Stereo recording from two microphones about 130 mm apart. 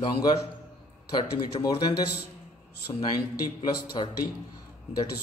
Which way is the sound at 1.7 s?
35° left (ahead or behind).